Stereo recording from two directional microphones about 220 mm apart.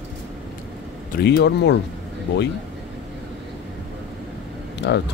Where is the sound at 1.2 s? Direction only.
50° left (ahead or behind).